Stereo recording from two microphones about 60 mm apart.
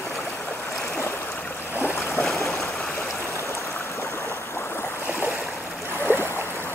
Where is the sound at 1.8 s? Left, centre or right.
Left.